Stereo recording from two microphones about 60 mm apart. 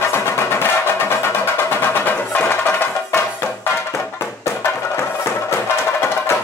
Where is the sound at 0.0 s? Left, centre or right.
Left.